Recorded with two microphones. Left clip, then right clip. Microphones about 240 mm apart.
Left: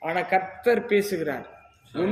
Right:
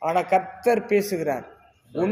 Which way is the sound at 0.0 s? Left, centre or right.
Right.